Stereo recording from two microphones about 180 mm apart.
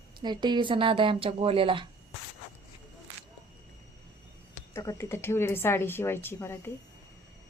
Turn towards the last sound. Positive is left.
turn(degrees=15)  # may be behind; listen again after turning